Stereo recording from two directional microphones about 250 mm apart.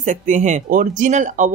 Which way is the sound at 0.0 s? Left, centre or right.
Right.